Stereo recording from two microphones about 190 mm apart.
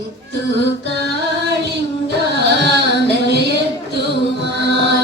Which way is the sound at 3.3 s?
60° right (ahead or behind).